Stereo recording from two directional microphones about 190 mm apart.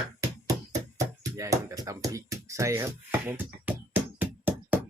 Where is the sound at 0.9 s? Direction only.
15° right (ahead or behind).